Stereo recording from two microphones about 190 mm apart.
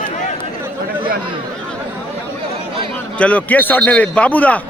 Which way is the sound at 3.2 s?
10° left (ahead or behind).